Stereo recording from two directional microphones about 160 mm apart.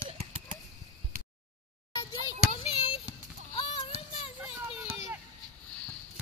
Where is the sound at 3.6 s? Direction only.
35° left (ahead or behind).